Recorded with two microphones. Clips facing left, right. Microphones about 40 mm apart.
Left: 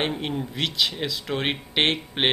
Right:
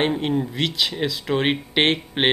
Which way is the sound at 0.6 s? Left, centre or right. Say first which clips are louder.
Right 2 dB; centre.